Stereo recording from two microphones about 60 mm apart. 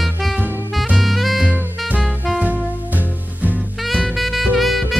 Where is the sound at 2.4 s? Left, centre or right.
Right.